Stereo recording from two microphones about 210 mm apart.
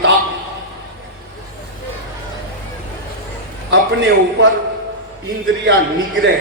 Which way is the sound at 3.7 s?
55° right (ahead or behind).